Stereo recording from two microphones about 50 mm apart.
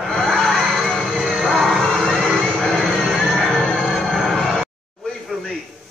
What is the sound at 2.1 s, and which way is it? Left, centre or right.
Vehicle, centre.